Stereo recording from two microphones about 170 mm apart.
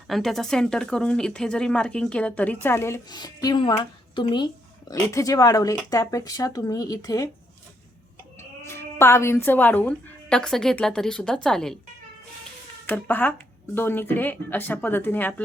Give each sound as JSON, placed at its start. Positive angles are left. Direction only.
{"t": 0.1, "sound": "speech", "side_deg": 0}
{"t": 8.4, "sound": "a woman's voice", "side_deg": 15}
{"t": 12.8, "sound": "speech", "side_deg": 10}